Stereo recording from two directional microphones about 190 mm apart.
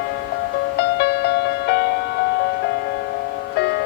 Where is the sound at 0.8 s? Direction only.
60° left (ahead or behind).